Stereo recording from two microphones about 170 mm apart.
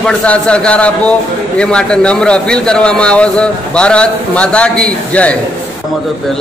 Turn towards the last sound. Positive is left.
turn(degrees=10)  # may be behind; listen again after turning